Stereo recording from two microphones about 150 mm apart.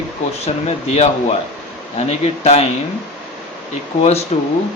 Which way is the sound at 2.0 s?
45° left (ahead or behind).